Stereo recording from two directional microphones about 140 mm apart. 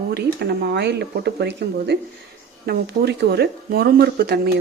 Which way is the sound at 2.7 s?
90° right.